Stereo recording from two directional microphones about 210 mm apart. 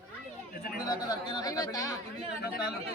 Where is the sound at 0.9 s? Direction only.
20° left (ahead or behind).